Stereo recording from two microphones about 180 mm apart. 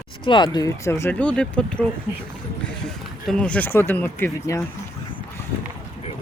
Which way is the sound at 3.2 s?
5° left (ahead or behind).